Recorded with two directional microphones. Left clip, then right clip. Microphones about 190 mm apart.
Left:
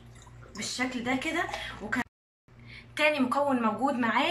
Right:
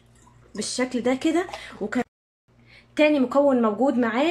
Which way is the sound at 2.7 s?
50° right (ahead or behind).